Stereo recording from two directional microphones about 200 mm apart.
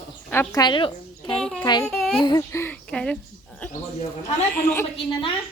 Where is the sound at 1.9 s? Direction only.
Centre (ahead or behind).